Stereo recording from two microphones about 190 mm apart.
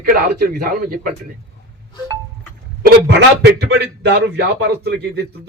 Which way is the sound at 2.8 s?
65° right (ahead or behind).